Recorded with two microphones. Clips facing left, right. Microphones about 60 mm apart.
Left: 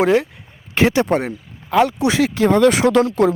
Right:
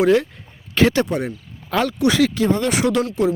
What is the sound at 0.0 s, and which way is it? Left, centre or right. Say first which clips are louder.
Speech: even; left.